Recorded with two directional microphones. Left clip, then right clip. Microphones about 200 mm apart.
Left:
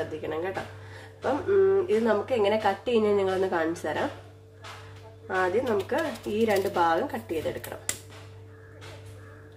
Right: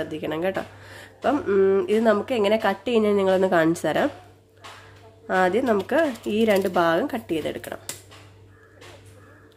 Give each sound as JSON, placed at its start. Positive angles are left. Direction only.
{"t": 0.2, "sound": "a woman's voice", "side_deg": -50}
{"t": 5.3, "sound": "a woman's voice", "side_deg": -50}